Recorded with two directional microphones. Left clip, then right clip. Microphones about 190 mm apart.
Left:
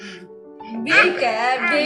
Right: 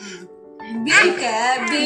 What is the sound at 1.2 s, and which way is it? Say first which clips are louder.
Speech: even; 60° left (ahead or behind).